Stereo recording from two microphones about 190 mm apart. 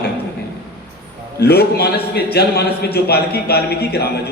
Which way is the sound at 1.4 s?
55° left (ahead or behind).